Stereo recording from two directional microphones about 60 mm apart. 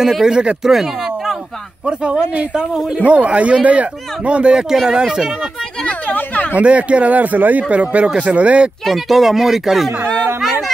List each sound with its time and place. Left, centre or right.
0.0 s speech: centre
1.9 s speech: centre
5.9 s a sound: left
6.5 s speech: right
8.8 s speech: centre